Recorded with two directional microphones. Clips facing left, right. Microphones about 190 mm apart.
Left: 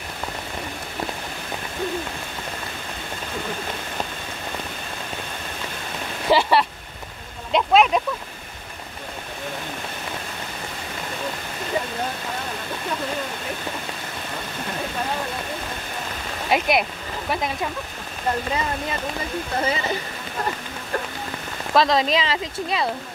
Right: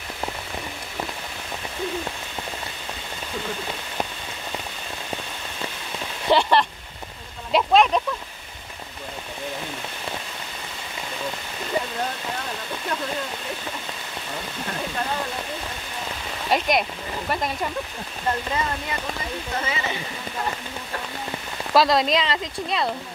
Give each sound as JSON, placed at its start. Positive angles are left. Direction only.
{"t": 6.3, "sound": "speech", "side_deg": 5}
{"t": 7.5, "sound": "a sound", "side_deg": 5}
{"t": 16.4, "sound": "speech", "side_deg": 5}
{"t": 19.6, "sound": "speech", "side_deg": 40}
{"t": 21.7, "sound": "speech", "side_deg": 0}